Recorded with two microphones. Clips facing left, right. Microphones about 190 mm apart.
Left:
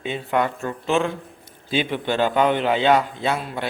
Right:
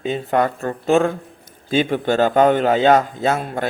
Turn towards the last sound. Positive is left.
turn(degrees=-45)  # may be behind; listen again after turning